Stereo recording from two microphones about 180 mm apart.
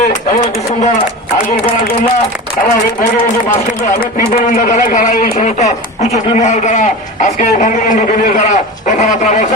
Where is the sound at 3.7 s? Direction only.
45° left (ahead or behind).